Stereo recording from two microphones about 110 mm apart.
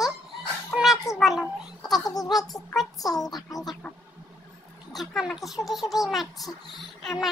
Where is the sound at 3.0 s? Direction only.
35° left (ahead or behind).